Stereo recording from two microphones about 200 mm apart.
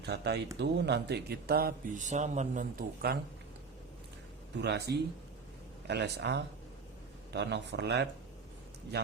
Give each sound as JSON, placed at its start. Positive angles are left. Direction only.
{"t": 0.0, "sound": "a man's voice", "side_deg": -55}
{"t": 4.5, "sound": "a man's voice", "side_deg": -55}